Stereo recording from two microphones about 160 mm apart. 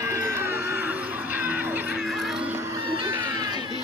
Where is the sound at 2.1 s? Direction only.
Centre (ahead or behind); by 2.8 s 15° right (ahead or behind).